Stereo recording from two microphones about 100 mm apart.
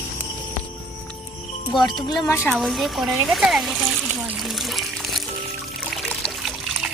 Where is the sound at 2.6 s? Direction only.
Centre (ahead or behind).